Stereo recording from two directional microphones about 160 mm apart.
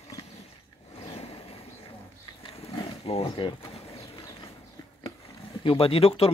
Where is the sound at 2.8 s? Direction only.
35° left (ahead or behind).